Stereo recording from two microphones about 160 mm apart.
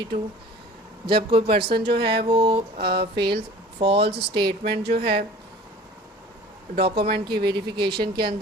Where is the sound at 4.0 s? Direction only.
90° right.